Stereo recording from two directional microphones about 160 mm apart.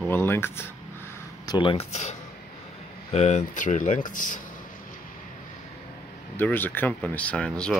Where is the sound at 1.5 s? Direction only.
30° left (ahead or behind).